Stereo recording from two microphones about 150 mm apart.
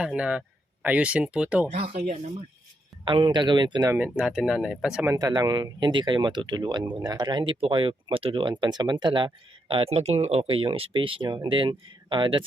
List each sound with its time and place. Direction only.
0.0 s speech: 5° right (ahead or behind)
1.7 s speech: 50° right (ahead or behind)
3.0 s speech: 30° right (ahead or behind)
3.9 s speech: 10° right (ahead or behind)
5.0 s speech: 25° right (ahead or behind)